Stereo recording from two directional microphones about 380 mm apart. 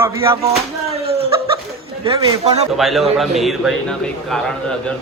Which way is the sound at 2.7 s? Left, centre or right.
Centre.